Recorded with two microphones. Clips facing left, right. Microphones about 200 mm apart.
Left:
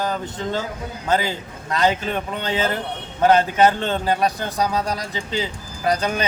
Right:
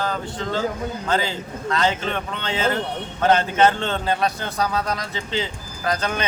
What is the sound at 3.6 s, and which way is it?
Speech, 15° left (ahead or behind).